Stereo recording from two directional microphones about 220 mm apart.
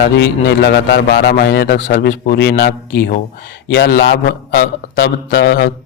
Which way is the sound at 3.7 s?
45° left (ahead or behind).